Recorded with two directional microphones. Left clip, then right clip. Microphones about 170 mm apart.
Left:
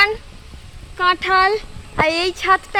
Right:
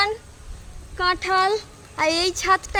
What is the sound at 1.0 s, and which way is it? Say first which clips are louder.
A woman's voice: left 5 dB; 35° left (ahead or behind).